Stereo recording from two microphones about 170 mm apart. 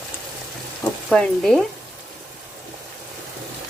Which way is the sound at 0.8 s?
5° left (ahead or behind).